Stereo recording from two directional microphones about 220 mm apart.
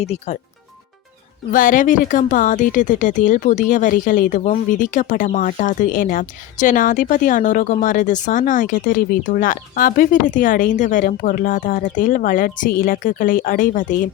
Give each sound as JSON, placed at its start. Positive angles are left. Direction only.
{"t": 0.0, "sound": "speech", "side_deg": 30}
{"t": 1.5, "sound": "speech", "side_deg": 40}